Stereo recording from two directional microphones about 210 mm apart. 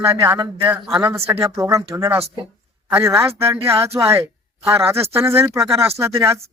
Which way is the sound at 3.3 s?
25° right (ahead or behind).